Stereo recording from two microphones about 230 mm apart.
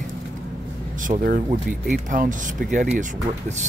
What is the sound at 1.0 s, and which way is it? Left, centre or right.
Speech, right.